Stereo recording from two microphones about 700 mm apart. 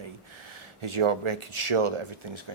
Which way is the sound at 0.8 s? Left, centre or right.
Right.